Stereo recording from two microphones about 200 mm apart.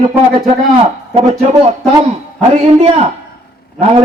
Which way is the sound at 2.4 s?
35° right (ahead or behind).